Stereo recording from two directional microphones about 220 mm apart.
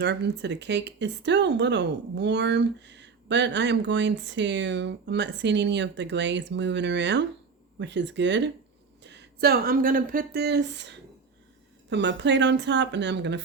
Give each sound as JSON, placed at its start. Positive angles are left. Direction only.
{"t": 0.0, "sound": "speech", "side_deg": -50}